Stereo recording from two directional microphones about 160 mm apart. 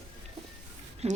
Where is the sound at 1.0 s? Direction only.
40° right (ahead or behind).